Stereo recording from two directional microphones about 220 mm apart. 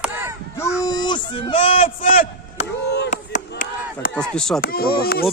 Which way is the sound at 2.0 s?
40° left (ahead or behind).